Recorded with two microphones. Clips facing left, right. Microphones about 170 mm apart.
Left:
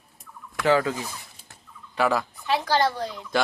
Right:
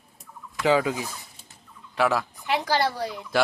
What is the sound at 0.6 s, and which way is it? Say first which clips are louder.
Speech: even; 15° right (ahead or behind).